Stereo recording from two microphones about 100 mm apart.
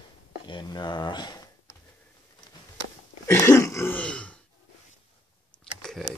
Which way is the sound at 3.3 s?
25° left (ahead or behind).